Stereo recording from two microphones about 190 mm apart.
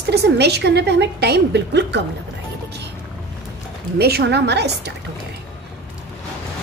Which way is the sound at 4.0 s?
60° right (ahead or behind).